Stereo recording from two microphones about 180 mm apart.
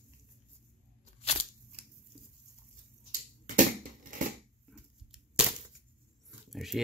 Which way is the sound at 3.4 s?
45° right (ahead or behind).